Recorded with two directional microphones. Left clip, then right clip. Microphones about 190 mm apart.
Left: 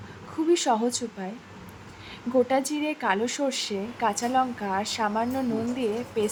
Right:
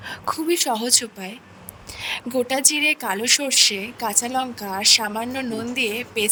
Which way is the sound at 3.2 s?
55° right (ahead or behind).